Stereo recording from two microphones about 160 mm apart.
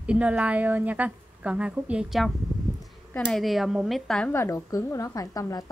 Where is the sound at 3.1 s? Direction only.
15° left (ahead or behind).